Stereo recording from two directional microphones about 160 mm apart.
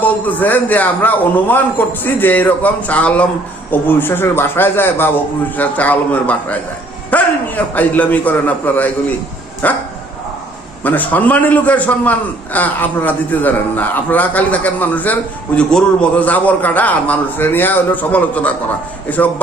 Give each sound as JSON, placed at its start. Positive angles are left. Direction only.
{"t": 0.0, "sound": "a man's voice", "side_deg": 10}
{"t": 10.8, "sound": "a man's voice", "side_deg": 10}